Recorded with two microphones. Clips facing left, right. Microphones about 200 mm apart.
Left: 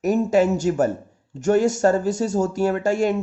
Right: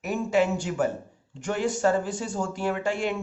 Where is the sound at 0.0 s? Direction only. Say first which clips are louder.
Left 6 dB; 40° left (ahead or behind).